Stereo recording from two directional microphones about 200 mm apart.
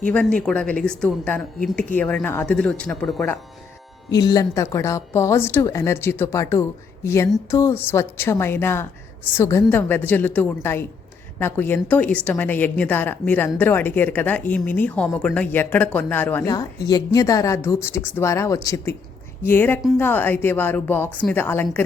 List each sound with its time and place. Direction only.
0.1 s a woman's voice: 5° left (ahead or behind)
4.1 s a woman's voice: 20° left (ahead or behind)
16.5 s a woman's voice: 20° left (ahead or behind)